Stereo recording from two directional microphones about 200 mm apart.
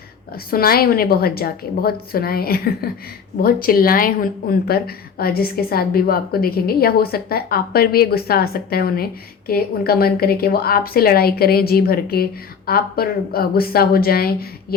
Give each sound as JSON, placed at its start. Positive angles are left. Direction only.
{"t": 0.3, "sound": "a woman's voice", "side_deg": 50}